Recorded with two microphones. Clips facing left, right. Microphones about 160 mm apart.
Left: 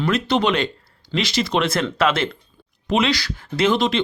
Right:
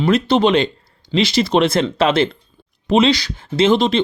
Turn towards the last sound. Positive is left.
turn(degrees=-25)  # may be behind; listen again after turning